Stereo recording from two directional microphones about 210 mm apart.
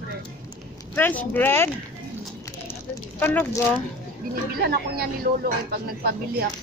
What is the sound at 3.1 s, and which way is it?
Speech, 10° left (ahead or behind).